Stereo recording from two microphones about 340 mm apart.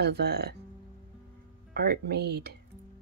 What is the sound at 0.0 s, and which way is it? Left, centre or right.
Speech, right.